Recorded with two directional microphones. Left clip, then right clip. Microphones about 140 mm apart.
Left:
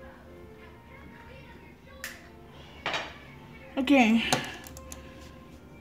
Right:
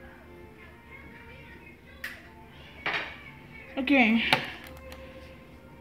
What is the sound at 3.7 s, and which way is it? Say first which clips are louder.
Speech: even; 5° left (ahead or behind).